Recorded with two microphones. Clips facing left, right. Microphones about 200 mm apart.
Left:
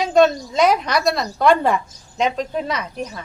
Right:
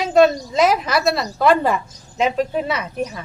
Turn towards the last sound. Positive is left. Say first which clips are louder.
# right 2 dB
turn(degrees=-5)  # may be behind; listen again after turning